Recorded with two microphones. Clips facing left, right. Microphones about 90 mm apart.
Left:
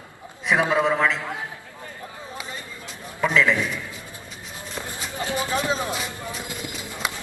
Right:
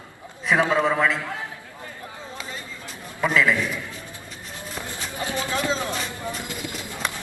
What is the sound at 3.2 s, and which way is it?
Speech, 5° right (ahead or behind).